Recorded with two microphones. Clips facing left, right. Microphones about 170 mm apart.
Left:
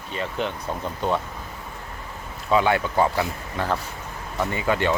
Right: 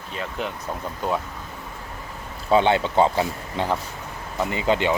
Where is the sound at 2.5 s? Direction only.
25° right (ahead or behind).